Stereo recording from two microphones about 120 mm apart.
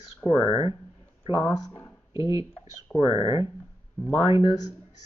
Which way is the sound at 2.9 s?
40° left (ahead or behind).